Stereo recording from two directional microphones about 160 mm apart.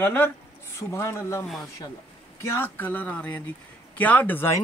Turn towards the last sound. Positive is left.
turn(degrees=15)  # may be behind; listen again after turning